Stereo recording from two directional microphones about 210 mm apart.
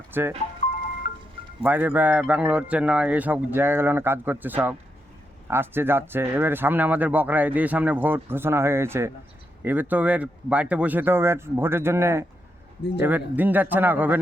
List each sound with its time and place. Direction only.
0.1 s speech: 10° right (ahead or behind)
1.0 s music: 40° left (ahead or behind)
1.6 s speech: 10° right (ahead or behind)